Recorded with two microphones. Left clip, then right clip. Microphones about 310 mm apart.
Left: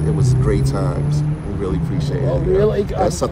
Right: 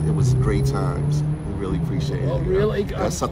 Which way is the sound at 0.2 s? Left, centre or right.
Centre.